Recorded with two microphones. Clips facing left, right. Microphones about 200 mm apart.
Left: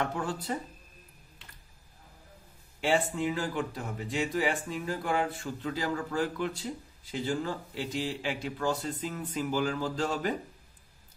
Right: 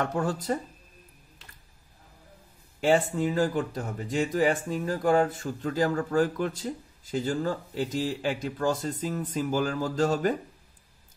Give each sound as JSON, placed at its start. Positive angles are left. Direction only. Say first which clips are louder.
{"t": 0.0, "sound": "speech", "louder": "right 4 dB", "side_deg": -45}
{"t": 2.8, "sound": "speech", "louder": "right 5 dB", "side_deg": -45}